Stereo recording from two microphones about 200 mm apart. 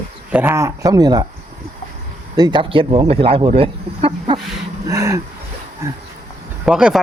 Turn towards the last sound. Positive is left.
turn(degrees=-5)  # may be behind; listen again after turning